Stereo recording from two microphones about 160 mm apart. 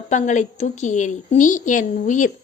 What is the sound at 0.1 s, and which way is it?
A woman's voice, 50° left (ahead or behind).